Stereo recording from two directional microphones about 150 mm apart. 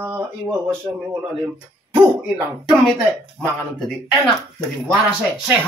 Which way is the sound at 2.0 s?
10° right (ahead or behind).